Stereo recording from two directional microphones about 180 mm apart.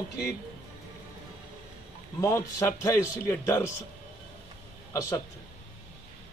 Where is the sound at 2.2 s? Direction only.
15° left (ahead or behind).